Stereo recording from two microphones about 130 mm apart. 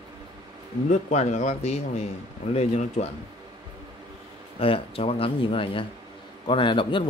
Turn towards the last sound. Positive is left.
turn(degrees=40)  # may be behind; listen again after turning